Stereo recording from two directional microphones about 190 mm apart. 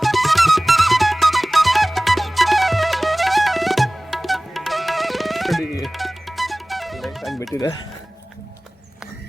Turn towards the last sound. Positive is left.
turn(degrees=15)  # may be behind; listen again after turning